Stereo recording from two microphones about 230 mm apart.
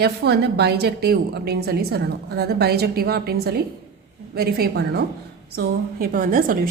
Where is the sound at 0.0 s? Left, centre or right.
Right.